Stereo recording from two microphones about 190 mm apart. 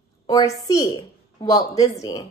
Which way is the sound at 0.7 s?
20° left (ahead or behind).